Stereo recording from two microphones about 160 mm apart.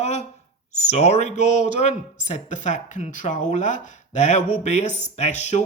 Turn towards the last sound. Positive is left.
turn(degrees=45)  # may be behind; listen again after turning